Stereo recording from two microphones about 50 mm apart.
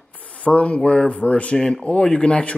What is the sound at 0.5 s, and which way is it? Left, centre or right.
A man's voice, left.